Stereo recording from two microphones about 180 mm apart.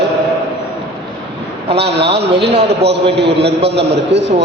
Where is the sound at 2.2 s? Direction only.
70° right (ahead or behind).